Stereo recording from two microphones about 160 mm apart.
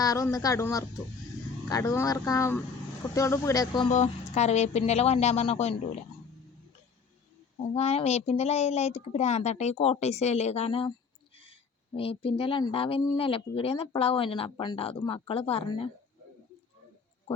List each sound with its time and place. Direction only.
0.0 s speech: 20° left (ahead or behind)
3.8 s speech: 45° left (ahead or behind)
7.7 s speech: 40° left (ahead or behind)
11.9 s speech: 35° left (ahead or behind)